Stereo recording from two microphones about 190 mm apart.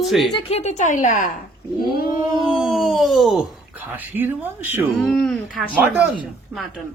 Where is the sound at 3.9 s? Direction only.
10° right (ahead or behind).